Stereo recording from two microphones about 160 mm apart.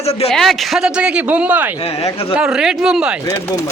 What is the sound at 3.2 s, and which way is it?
Speech, 15° left (ahead or behind).